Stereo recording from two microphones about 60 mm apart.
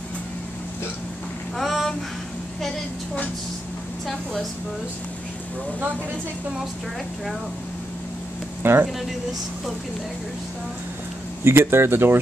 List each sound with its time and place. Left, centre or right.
1.6 s a sound: centre
8.6 s speech: right
11.4 s speech: right